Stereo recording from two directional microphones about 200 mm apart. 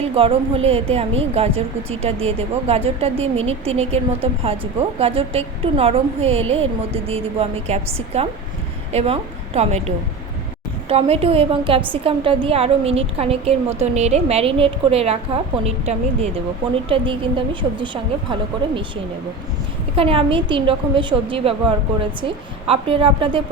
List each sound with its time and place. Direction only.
0.1 s a woman's voice: 25° right (ahead or behind)
20.0 s a woman's voice: 25° right (ahead or behind)